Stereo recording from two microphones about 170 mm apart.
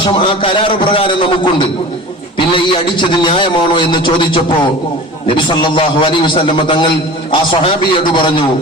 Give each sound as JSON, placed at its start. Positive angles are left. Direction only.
{"t": 0.0, "sound": "a man's voice", "side_deg": 30}